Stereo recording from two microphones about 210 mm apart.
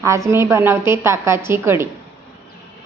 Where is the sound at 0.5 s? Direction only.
10° right (ahead or behind).